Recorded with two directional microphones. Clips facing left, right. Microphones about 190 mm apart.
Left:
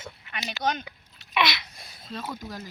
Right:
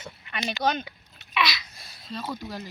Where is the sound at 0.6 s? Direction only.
55° right (ahead or behind).